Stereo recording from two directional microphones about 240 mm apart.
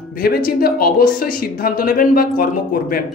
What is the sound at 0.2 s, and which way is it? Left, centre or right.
A woman's voice, left.